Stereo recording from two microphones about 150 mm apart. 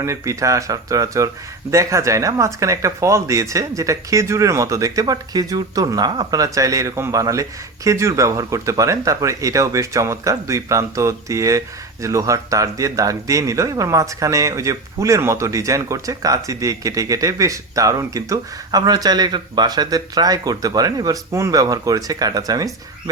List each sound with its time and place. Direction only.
0.0 s speech: 20° right (ahead or behind)